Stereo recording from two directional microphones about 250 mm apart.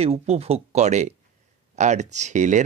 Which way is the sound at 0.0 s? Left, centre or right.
Right.